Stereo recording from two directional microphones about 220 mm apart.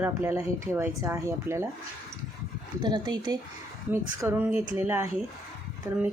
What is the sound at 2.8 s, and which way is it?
Speech, 20° right (ahead or behind).